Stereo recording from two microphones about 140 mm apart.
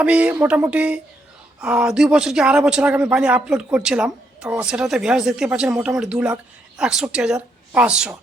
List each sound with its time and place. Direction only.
0.0 s speech: 10° right (ahead or behind)